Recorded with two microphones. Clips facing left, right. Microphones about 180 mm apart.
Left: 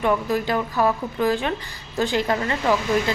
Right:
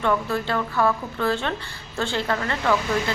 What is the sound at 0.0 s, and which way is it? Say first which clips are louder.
A woman's voice: left 2 dB; 15° left (ahead or behind).